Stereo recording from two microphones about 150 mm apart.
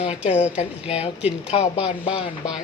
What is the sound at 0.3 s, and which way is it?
Speech, 50° left (ahead or behind).